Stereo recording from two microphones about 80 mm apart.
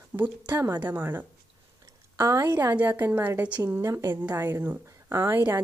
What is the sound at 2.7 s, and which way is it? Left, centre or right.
Speech, right.